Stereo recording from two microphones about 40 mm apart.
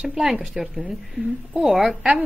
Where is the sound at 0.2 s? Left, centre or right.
Centre.